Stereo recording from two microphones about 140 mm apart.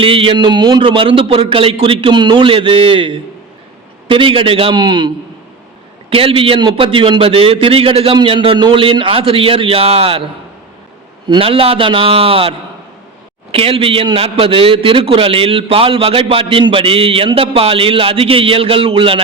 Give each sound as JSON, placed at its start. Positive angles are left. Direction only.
{"t": 0.0, "sound": "a man's voice", "side_deg": -40}
{"t": 11.3, "sound": "a man's voice", "side_deg": -40}